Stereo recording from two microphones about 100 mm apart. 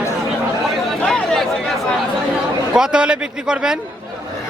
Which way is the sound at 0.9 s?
5° left (ahead or behind).